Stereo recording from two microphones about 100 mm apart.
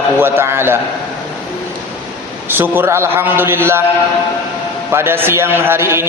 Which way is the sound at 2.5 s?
20° right (ahead or behind).